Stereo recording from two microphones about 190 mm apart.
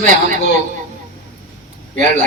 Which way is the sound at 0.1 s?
45° right (ahead or behind).